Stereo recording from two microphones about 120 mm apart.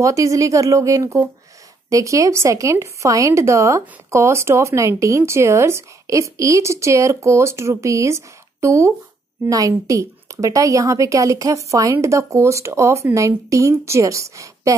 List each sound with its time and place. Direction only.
0.0 s a woman's voice: 25° right (ahead or behind)